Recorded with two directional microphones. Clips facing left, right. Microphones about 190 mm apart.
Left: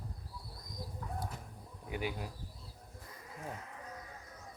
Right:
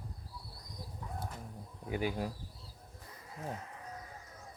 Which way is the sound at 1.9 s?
40° right (ahead or behind).